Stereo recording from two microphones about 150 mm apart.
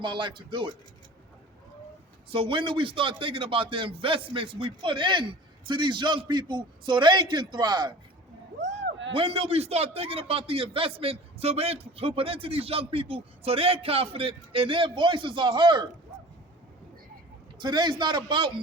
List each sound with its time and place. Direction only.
0.0 s a man's voice: 35° right (ahead or behind)
2.3 s a man's voice: 35° right (ahead or behind)
9.1 s a man's voice: 40° right (ahead or behind)
17.6 s a man's voice: 30° right (ahead or behind)